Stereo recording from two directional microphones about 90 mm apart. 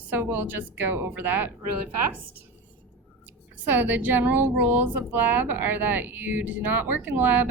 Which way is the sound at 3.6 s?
20° right (ahead or behind).